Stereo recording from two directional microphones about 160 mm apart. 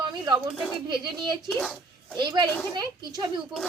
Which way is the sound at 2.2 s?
25° right (ahead or behind).